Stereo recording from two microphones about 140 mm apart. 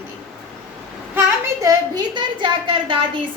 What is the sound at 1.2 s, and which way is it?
A woman's voice, 20° right (ahead or behind).